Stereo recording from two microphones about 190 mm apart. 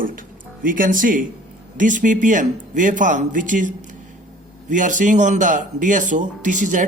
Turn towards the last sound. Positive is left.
turn(degrees=-40)  # may be behind; listen again after turning